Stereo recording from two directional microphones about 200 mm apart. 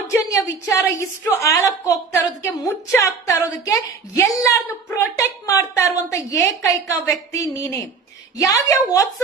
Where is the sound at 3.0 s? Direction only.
15° left (ahead or behind).